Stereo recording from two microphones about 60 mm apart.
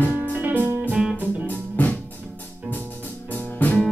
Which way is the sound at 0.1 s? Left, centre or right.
Right.